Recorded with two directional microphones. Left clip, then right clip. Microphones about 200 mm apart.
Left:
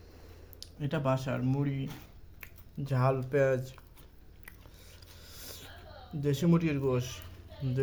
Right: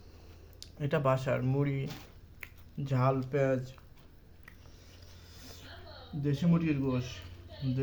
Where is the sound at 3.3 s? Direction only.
40° left (ahead or behind).